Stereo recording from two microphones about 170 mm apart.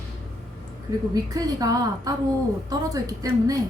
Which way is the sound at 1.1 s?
20° right (ahead or behind).